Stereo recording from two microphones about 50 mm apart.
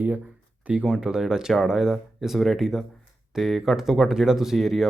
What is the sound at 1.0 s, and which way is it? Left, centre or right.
Speech, centre.